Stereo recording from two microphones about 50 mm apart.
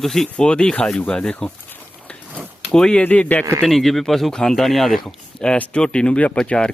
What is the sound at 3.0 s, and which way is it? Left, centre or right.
Speech, left.